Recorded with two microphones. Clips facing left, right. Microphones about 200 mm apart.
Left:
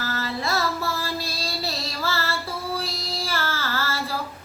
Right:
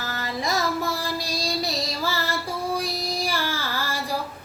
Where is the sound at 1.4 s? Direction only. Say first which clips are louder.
Right 3 dB; 15° right (ahead or behind).